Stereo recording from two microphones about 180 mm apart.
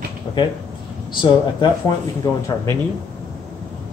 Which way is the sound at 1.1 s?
25° left (ahead or behind).